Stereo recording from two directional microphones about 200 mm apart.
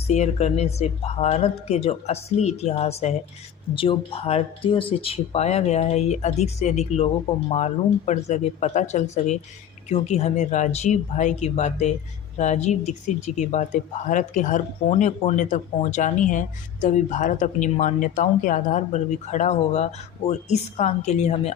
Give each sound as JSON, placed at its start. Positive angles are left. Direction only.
{"t": 0.1, "sound": "speech", "side_deg": 35}